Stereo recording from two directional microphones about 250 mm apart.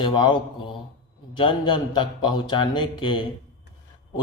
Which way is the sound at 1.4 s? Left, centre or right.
Centre.